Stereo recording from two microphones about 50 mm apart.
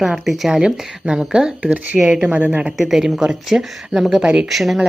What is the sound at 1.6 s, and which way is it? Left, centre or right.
Speech, right.